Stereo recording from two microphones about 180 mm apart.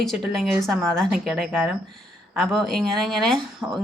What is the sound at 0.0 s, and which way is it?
Speech, centre (ahead or behind).